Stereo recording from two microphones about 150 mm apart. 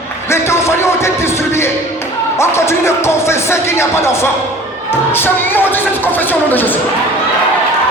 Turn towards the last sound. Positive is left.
turn(degrees=10)  # may be behind; listen again after turning